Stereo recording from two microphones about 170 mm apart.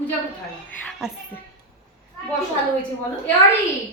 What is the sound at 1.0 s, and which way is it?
Speech, 5° right (ahead or behind).